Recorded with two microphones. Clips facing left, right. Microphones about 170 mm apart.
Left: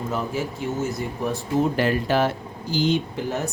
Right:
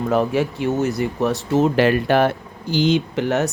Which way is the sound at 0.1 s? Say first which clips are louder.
Right 9 dB; 65° right (ahead or behind).